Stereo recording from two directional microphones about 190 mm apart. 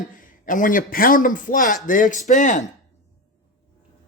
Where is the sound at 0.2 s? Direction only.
45° left (ahead or behind).